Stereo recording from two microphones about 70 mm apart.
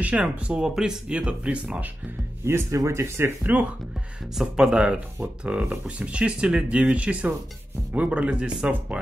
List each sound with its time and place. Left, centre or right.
0.0 s speech: centre
2.4 s speech: right
3.4 s speech: right
4.4 s speech: centre